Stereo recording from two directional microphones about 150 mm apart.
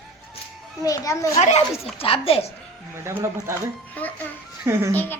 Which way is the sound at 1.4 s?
45° left (ahead or behind).